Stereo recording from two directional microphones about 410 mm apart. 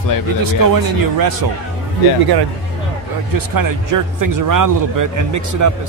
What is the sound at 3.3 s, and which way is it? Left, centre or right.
Speech, right.